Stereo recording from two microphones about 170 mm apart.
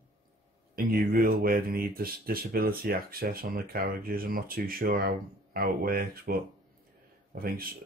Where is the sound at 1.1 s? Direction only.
60° right (ahead or behind).